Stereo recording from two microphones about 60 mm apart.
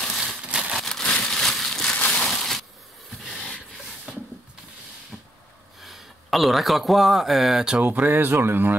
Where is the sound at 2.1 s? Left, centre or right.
Centre.